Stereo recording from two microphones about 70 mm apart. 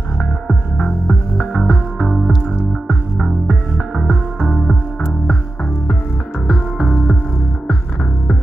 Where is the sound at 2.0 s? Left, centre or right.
Centre.